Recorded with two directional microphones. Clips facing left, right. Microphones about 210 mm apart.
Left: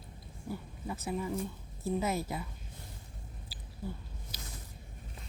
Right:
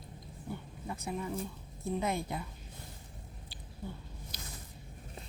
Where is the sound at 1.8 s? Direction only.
5° left (ahead or behind).